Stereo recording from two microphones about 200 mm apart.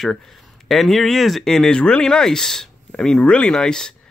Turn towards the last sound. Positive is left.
turn(degrees=5)  # may be behind; listen again after turning